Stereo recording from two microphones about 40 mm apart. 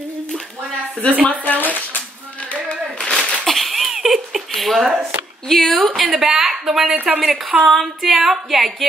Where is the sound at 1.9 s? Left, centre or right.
Left.